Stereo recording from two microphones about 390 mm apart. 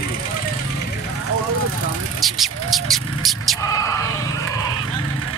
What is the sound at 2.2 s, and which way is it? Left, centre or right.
Speech, centre.